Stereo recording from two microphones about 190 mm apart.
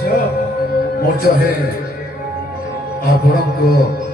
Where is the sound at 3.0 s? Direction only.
55° left (ahead or behind).